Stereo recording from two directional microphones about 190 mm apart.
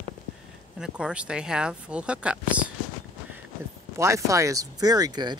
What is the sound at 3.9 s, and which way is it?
Speech, 15° right (ahead or behind).